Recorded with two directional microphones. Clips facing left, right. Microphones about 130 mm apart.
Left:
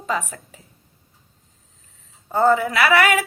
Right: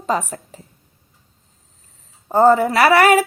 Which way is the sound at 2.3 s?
35° right (ahead or behind).